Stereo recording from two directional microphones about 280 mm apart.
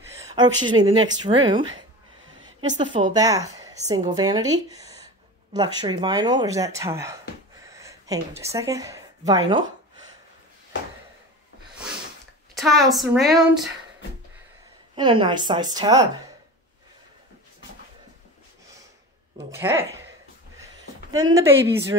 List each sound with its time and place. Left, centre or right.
0.2 s a woman's voice: centre
2.7 s a woman's voice: centre
12.5 s a woman's voice: centre
15.0 s a woman's voice: centre
19.3 s a woman's voice: centre
21.1 s a woman's voice: centre